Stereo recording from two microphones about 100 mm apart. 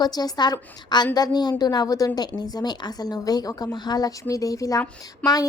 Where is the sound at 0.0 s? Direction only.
40° left (ahead or behind).